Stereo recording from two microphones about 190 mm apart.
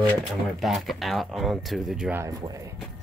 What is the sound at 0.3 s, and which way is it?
Speech, centre (ahead or behind).